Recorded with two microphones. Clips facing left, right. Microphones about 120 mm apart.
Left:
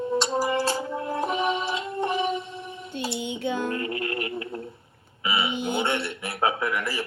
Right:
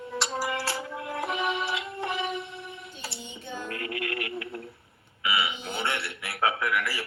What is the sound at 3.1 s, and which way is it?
Music, 75° left (ahead or behind).